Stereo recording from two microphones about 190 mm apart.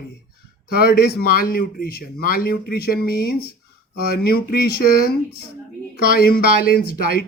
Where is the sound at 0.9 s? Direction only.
50° left (ahead or behind).